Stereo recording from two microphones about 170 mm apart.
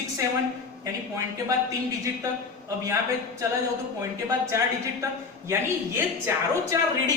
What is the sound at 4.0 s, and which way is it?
Speech, 15° right (ahead or behind).